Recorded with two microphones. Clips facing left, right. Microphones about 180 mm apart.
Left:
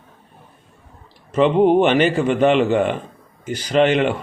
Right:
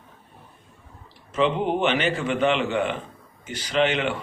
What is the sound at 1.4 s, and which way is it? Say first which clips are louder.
Speech: left 8 dB; 50° left (ahead or behind).